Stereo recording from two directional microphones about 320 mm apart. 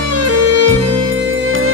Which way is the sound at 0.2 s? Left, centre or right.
Right.